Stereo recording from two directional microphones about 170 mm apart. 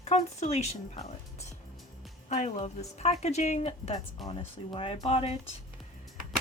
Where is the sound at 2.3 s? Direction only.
40° left (ahead or behind).